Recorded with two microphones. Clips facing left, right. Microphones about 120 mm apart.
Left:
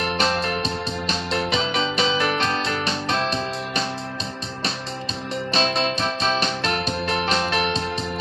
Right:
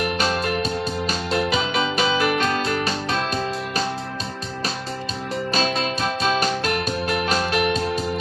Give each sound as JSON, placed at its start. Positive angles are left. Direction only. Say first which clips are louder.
{"t": 0.0, "sound": "music", "louder": "even", "side_deg": 30}
{"t": 5.5, "sound": "music", "louder": "left 1 dB", "side_deg": 30}